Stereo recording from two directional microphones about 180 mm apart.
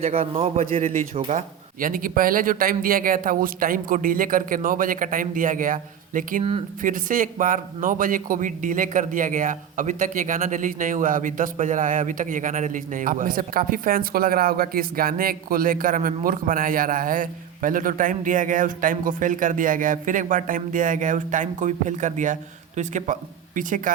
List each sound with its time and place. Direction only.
0.0 s a man's voice: 30° right (ahead or behind)
0.6 s a man's voice: 50° right (ahead or behind)
1.1 s a man's voice: 35° right (ahead or behind)